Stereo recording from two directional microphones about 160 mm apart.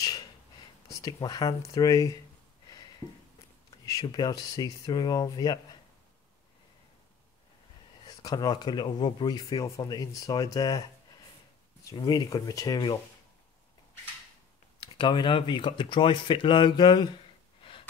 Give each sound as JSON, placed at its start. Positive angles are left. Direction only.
{"t": 0.8, "sound": "speech", "side_deg": 20}
{"t": 3.8, "sound": "speech", "side_deg": 25}
{"t": 8.2, "sound": "speech", "side_deg": 25}
{"t": 11.9, "sound": "speech", "side_deg": 25}
{"t": 14.8, "sound": "speech", "side_deg": 30}